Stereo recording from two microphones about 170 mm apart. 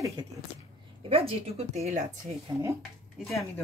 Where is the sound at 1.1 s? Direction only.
35° right (ahead or behind).